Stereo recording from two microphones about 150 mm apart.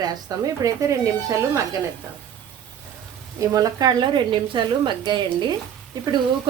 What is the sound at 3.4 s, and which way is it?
Speech, 20° right (ahead or behind).